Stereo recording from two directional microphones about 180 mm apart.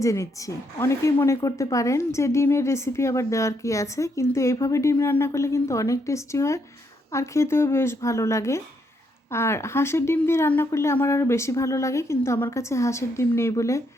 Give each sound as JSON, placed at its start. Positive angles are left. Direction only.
{"t": 0.0, "sound": "a woman's voice", "side_deg": 15}